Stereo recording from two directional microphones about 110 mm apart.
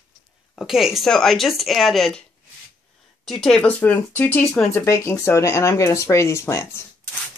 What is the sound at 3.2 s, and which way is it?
Speech, 5° left (ahead or behind).